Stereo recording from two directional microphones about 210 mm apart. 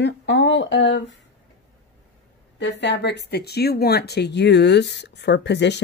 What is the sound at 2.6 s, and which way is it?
Speech, 55° left (ahead or behind).